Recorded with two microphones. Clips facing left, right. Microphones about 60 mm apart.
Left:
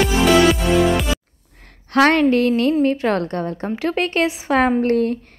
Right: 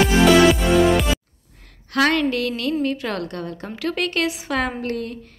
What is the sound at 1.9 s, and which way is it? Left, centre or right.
A woman's voice, left.